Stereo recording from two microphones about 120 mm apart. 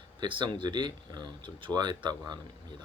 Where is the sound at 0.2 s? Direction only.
40° right (ahead or behind).